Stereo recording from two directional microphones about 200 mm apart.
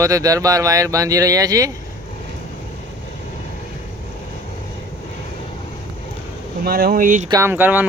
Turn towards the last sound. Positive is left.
turn(degrees=-10)  # may be behind; listen again after turning